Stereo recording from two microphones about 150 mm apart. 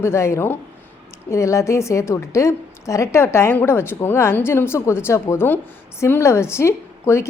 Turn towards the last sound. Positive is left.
turn(degrees=20)  # may be behind; listen again after turning